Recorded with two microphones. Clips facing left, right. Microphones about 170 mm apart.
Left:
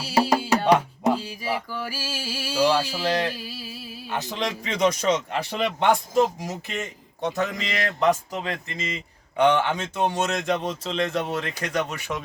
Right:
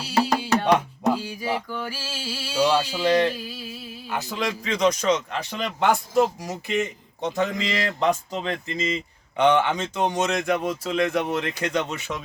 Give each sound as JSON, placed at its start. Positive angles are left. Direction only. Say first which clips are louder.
{"t": 0.0, "sound": "music", "louder": "left 1 dB", "side_deg": 0}
{"t": 4.1, "sound": "a man's voice", "louder": "right 1 dB", "side_deg": -10}
{"t": 5.8, "sound": "a man's voice", "louder": "right 1 dB", "side_deg": -5}
{"t": 6.5, "sound": "speech", "louder": "right 6 dB", "side_deg": -20}
{"t": 8.4, "sound": "speech", "louder": "right 8 dB", "side_deg": -35}
{"t": 9.4, "sound": "speech", "louder": "right 1 dB", "side_deg": -20}